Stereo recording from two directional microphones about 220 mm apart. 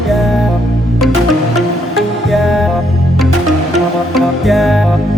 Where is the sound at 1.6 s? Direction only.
Centre (ahead or behind).